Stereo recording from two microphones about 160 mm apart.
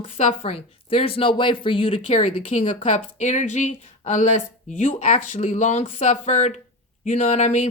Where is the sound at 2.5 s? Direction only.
45° left (ahead or behind).